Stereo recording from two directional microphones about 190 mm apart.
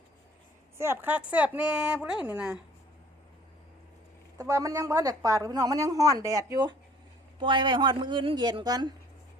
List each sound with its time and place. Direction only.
0.8 s a woman's voice: 10° right (ahead or behind)
4.4 s a woman's voice: 15° right (ahead or behind)